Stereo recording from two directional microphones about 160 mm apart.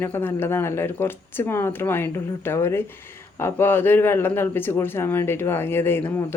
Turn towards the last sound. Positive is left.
turn(degrees=15)  # may be behind; listen again after turning